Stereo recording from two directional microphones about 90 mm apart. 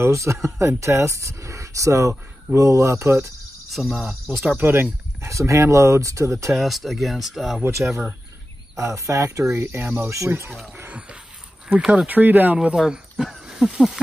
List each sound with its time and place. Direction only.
0.0 s speech: 35° right (ahead or behind)
3.8 s speech: 15° left (ahead or behind)
4.6 s speech: 25° right (ahead or behind)
5.2 s speech: 35° right (ahead or behind)
6.5 s speech: centre (ahead or behind)
8.7 s speech: 35° right (ahead or behind)
10.9 s speech: 10° right (ahead or behind)
12.5 s speech: 5° right (ahead or behind)
13.2 s snake: 5° right (ahead or behind)